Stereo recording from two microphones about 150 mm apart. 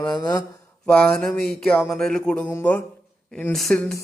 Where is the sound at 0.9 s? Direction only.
5° left (ahead or behind).